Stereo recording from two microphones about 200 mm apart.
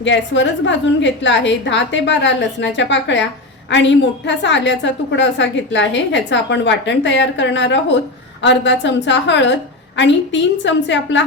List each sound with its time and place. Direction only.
0.0 s a woman's voice: 65° left (ahead or behind)